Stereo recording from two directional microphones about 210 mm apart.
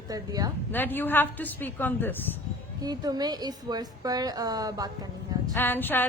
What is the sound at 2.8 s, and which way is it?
A woman's voice, 20° right (ahead or behind).